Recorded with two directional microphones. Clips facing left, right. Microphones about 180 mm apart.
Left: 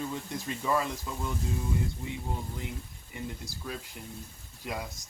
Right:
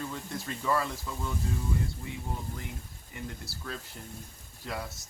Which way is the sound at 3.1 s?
15° left (ahead or behind).